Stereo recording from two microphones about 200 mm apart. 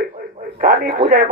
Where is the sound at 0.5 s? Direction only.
45° right (ahead or behind).